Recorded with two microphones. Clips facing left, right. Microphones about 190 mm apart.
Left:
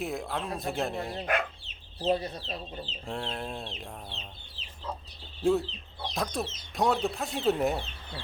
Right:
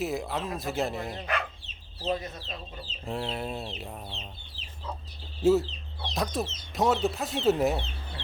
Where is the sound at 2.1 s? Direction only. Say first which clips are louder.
Left 3 dB; 35° left (ahead or behind).